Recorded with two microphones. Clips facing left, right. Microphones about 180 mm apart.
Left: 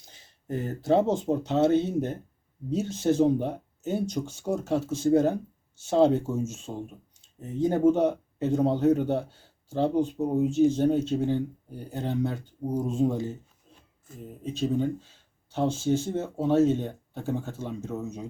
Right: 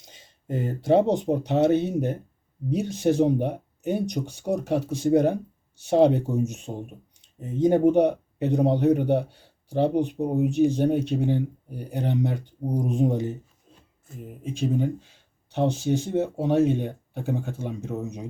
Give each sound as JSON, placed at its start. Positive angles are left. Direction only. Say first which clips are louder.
{"t": 0.1, "sound": "speech", "louder": "right 2 dB", "side_deg": -20}